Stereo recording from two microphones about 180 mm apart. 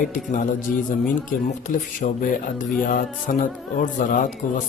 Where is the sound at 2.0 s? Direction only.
45° left (ahead or behind).